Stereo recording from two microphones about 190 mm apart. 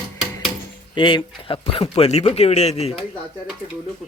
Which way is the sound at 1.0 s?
25° left (ahead or behind).